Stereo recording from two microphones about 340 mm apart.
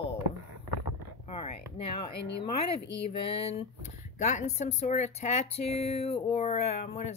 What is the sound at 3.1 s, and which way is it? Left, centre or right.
A woman's voice, centre.